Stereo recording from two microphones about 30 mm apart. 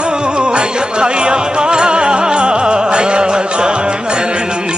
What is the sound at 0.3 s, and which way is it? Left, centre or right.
Music, right.